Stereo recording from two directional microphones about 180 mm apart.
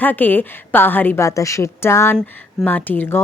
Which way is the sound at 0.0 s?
10° left (ahead or behind).